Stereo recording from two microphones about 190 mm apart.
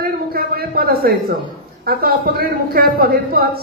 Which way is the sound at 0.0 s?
55° right (ahead or behind).